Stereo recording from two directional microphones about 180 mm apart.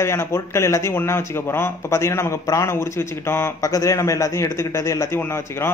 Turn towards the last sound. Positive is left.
turn(degrees=15)  # may be behind; listen again after turning